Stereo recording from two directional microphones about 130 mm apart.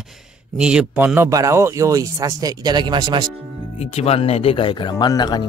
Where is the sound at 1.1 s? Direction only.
25° right (ahead or behind).